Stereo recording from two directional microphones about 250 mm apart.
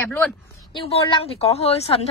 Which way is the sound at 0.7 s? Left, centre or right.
Left.